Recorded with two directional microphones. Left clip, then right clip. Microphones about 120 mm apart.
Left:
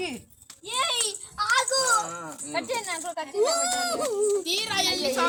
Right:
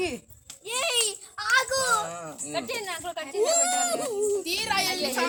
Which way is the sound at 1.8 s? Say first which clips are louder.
Left 1 dB; 20° right (ahead or behind).